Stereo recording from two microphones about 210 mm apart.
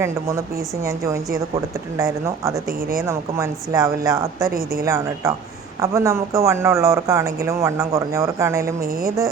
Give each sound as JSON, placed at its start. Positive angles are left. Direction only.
{"t": 0.0, "sound": "speech", "side_deg": -15}
{"t": 4.4, "sound": "a woman's voice", "side_deg": -45}
{"t": 4.9, "sound": "speech", "side_deg": -15}
{"t": 8.8, "sound": "a woman's voice", "side_deg": -45}
{"t": 9.0, "sound": "speech", "side_deg": -15}